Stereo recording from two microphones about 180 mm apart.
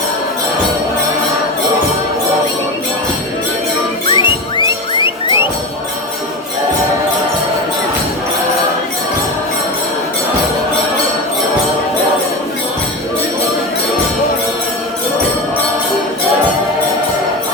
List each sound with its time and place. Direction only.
4.1 s music: 25° left (ahead or behind)